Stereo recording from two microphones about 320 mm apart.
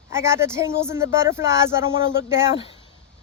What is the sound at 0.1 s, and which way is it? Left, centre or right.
Speech, centre.